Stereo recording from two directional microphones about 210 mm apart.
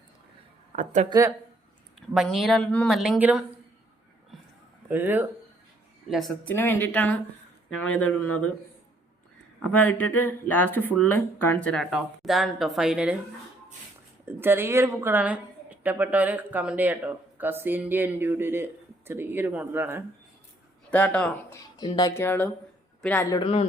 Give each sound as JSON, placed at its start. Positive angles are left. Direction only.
{"t": 2.1, "sound": "speech", "side_deg": 0}
{"t": 4.9, "sound": "a woman's voice", "side_deg": -10}
{"t": 9.6, "sound": "speech", "side_deg": 5}
{"t": 14.3, "sound": "a woman's voice", "side_deg": -10}
{"t": 20.9, "sound": "speech", "side_deg": 5}
{"t": 21.8, "sound": "speech", "side_deg": 20}
{"t": 23.4, "sound": "speech", "side_deg": 25}